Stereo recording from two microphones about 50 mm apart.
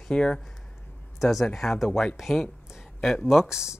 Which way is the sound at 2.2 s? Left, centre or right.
Centre.